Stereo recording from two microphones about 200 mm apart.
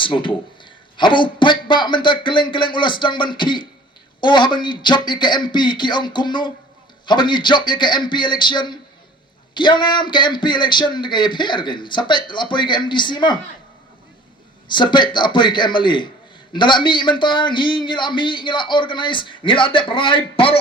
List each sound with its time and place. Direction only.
0.0 s a man's voice: 25° left (ahead or behind)
14.7 s a man's voice: 25° left (ahead or behind)